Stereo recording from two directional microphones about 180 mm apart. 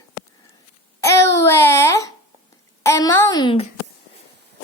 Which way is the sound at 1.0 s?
15° left (ahead or behind).